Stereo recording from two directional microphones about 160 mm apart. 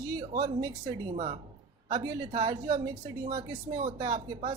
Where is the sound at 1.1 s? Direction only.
45° right (ahead or behind).